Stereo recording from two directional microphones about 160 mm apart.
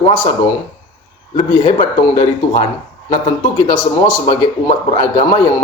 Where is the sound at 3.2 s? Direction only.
25° left (ahead or behind).